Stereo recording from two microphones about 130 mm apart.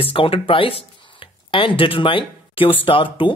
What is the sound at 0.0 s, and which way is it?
Speech, 45° left (ahead or behind).